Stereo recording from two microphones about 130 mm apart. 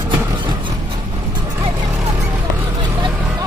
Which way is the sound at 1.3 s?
30° right (ahead or behind).